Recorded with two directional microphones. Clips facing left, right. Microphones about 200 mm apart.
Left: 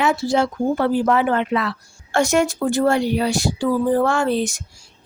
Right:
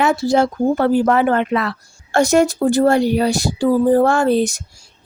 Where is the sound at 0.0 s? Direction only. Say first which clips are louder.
Right 3 dB; 40° right (ahead or behind).